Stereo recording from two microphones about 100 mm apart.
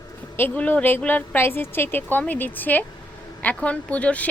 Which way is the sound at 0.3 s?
15° left (ahead or behind).